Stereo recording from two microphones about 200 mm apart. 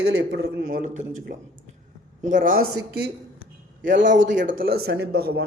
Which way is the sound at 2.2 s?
40° right (ahead or behind).